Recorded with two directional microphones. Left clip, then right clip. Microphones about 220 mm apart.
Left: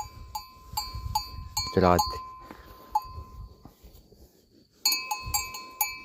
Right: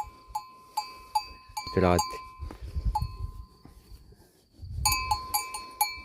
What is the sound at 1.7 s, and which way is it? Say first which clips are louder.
Speech: left 2 dB; 5° right (ahead or behind).